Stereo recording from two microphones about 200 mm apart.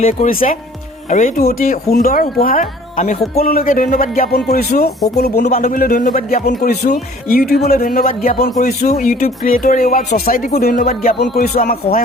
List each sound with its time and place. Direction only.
0.0 s speech: 45° left (ahead or behind)